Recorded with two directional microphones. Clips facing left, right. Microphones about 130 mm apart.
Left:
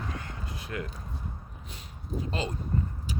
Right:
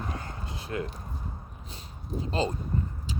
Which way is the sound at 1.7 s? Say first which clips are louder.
Even; 30° right (ahead or behind).